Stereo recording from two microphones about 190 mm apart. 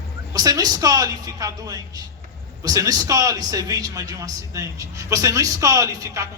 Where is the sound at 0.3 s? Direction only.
20° right (ahead or behind).